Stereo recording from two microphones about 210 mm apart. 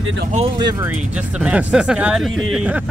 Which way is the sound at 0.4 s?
20° right (ahead or behind).